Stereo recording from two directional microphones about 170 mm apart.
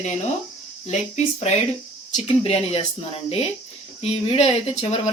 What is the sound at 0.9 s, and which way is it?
Speech, 45° left (ahead or behind).